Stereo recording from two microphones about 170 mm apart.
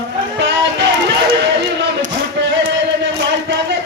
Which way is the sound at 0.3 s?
90° right.